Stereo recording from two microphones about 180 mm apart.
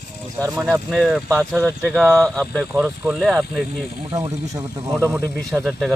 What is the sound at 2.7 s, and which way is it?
Speech, 10° right (ahead or behind).